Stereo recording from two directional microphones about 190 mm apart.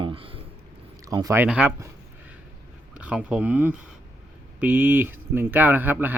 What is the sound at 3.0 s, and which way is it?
Speech, 5° right (ahead or behind).